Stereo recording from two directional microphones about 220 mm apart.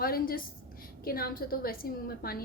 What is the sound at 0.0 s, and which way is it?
A woman's voice, 45° left (ahead or behind).